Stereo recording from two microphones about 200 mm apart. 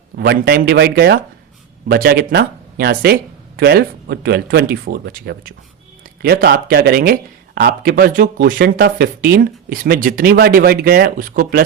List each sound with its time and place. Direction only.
0.2 s speech: 50° right (ahead or behind)